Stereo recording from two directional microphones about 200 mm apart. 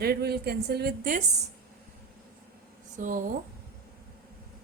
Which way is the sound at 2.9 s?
40° right (ahead or behind).